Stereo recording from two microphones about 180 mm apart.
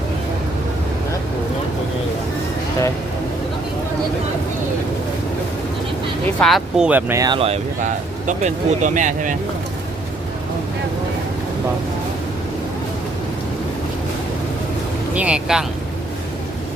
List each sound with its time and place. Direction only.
6.4 s speech: centre (ahead or behind)
7.2 s speech: 25° right (ahead or behind); by 9.3 s 45° right (ahead or behind)
15.1 s speech: 5° right (ahead or behind)